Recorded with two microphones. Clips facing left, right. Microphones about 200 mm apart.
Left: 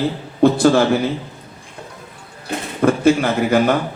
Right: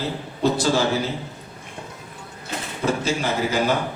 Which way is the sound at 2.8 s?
55° left (ahead or behind).